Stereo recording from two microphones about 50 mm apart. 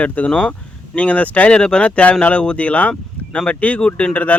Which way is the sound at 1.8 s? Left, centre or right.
Left.